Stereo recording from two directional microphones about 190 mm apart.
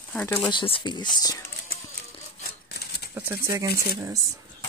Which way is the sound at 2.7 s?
55° left (ahead or behind).